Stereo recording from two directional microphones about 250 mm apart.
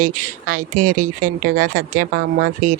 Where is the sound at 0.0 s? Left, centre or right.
Right.